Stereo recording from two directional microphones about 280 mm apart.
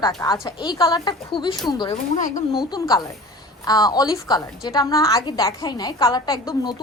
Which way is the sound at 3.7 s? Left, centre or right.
Centre.